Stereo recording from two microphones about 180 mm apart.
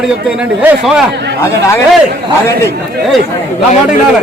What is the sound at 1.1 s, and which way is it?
Speech, 70° right (ahead or behind).